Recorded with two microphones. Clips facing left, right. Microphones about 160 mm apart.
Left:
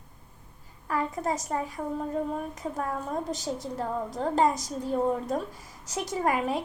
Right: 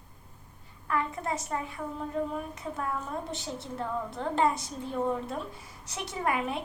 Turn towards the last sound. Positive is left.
turn(degrees=40)  # may be behind; listen again after turning